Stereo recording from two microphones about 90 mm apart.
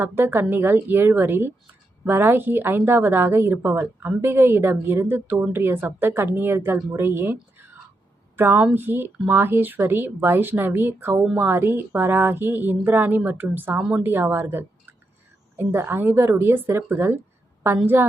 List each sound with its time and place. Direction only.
0.0 s a woman's voice: 25° right (ahead or behind)
8.4 s a woman's voice: 20° right (ahead or behind)